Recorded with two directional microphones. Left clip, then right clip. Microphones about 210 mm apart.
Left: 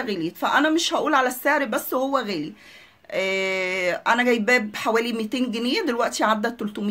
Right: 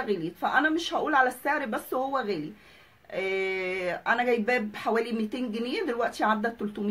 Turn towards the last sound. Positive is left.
turn(degrees=45)  # may be behind; listen again after turning